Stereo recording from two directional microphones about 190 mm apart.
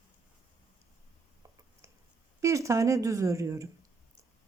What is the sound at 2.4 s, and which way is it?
Speech, 15° right (ahead or behind).